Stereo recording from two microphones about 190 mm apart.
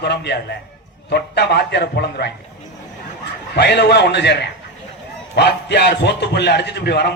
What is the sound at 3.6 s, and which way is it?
Speech, 60° left (ahead or behind).